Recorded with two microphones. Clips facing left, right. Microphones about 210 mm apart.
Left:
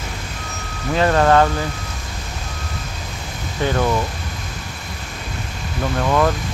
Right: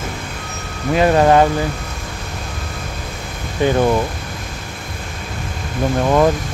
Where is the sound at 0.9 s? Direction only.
15° right (ahead or behind).